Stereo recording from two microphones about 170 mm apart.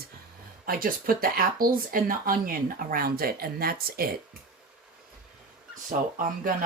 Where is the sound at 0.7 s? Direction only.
60° right (ahead or behind).